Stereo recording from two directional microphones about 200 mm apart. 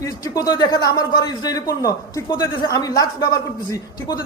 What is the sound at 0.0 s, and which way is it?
A man's voice, 20° left (ahead or behind).